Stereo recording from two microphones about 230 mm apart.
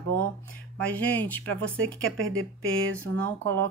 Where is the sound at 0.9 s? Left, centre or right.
Centre.